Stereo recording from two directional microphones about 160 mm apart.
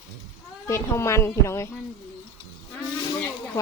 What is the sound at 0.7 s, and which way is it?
Speech, 15° left (ahead or behind).